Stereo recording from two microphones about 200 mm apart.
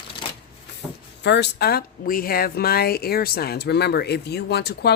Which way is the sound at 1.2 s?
60° left (ahead or behind).